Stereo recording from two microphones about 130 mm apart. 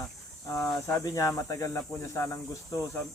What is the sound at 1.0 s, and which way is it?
Speech, 25° left (ahead or behind).